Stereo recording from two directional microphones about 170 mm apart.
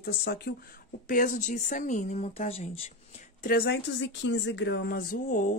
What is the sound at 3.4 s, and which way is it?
A woman's voice, 65° left (ahead or behind).